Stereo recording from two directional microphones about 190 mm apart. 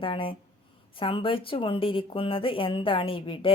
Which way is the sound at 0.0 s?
30° left (ahead or behind).